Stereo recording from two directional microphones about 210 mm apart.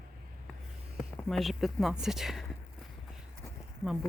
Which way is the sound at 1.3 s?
Centre (ahead or behind).